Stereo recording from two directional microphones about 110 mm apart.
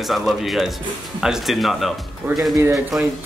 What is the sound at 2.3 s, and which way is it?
Speech, 20° right (ahead or behind).